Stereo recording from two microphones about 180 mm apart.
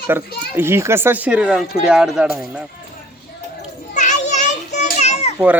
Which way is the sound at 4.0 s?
40° left (ahead or behind).